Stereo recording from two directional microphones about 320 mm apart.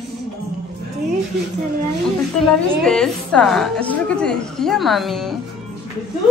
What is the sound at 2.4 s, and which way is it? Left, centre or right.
A woman's voice, centre.